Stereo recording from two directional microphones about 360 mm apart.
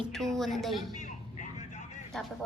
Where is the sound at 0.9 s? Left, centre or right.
Left.